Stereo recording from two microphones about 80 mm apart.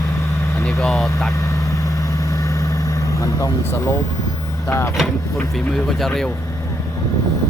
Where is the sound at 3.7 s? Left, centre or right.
Left.